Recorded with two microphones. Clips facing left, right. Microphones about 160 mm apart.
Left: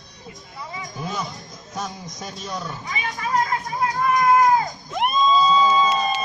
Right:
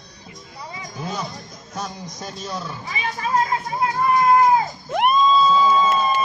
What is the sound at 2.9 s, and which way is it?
Music, 30° right (ahead or behind).